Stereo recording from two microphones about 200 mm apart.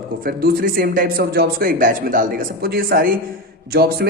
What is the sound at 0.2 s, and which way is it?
A man's voice, 50° right (ahead or behind).